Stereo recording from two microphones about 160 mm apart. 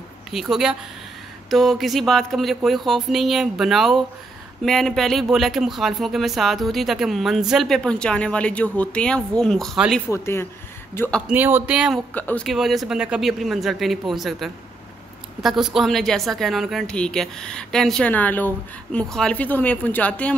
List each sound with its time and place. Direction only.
0.3 s speech: centre (ahead or behind)
10.0 s speech: 15° left (ahead or behind)
11.2 s speech: 10° right (ahead or behind)
12.1 s speech: 10° left (ahead or behind)
12.4 s speech: centre (ahead or behind)